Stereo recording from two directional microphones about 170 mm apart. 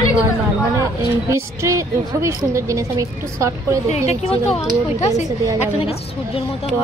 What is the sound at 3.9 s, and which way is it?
Speech, 40° left (ahead or behind).